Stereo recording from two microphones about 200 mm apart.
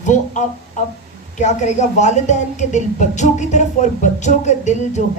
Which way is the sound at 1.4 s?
35° left (ahead or behind).